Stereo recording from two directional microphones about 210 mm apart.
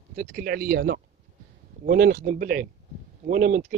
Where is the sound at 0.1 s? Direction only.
40° right (ahead or behind).